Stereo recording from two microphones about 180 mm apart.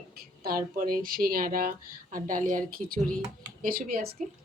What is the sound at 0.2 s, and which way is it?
Speech, 55° right (ahead or behind).